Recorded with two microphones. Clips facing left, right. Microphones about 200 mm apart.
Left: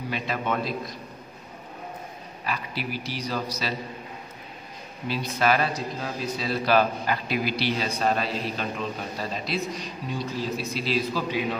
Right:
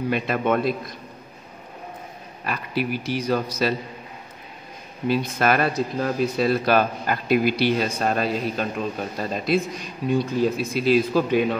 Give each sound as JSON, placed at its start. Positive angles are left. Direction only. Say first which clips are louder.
{"t": 0.1, "sound": "speech", "louder": "right 6 dB", "side_deg": -55}
{"t": 2.4, "sound": "speech", "louder": "right 6 dB", "side_deg": -50}
{"t": 5.0, "sound": "speech", "louder": "right 4 dB", "side_deg": -50}